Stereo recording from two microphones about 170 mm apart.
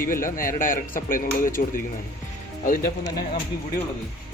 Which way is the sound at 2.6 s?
55° left (ahead or behind).